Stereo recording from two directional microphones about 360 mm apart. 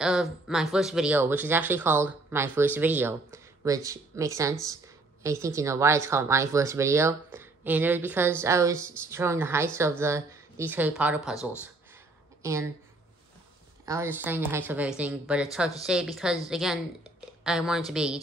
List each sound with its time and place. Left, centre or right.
0.0 s speech: centre
12.4 s speech: centre
13.8 s speech: centre